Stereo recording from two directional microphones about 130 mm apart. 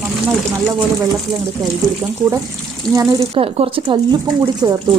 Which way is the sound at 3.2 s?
45° right (ahead or behind).